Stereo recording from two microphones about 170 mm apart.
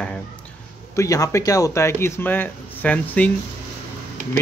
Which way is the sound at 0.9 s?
20° left (ahead or behind).